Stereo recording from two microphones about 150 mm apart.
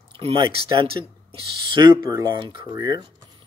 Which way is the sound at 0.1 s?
35° right (ahead or behind).